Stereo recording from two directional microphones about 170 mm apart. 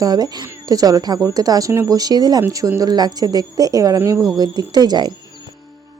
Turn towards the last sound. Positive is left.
turn(degrees=-25)  # may be behind; listen again after turning